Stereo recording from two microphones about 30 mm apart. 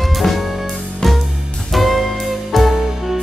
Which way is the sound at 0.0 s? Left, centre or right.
Centre.